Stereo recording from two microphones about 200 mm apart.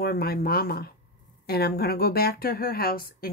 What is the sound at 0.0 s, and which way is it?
Speech, 50° left (ahead or behind).